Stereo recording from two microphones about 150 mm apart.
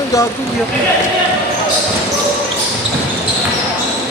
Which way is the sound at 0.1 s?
20° left (ahead or behind).